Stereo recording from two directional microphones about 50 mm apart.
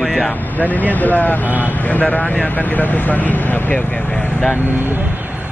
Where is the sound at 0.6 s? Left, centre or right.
Left.